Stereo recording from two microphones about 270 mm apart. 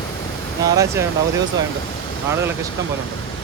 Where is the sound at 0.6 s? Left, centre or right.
Centre.